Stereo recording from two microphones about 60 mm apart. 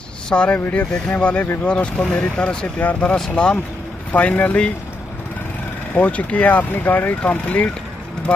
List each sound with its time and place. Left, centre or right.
0.3 s speech: centre
5.9 s speech: left